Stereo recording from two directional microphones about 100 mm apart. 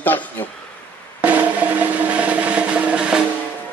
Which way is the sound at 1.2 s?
15° right (ahead or behind).